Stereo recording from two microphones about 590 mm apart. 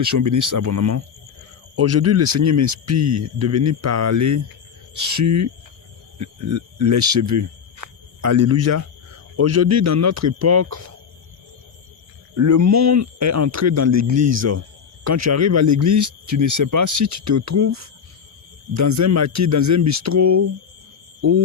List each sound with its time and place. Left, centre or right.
0.0 s speech: right
12.3 s speech: right
21.2 s a sound: right